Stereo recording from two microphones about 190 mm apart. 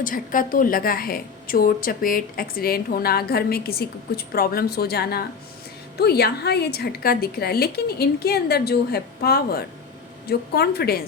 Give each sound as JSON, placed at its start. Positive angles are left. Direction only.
{"t": 0.0, "sound": "a woman's voice", "side_deg": 45}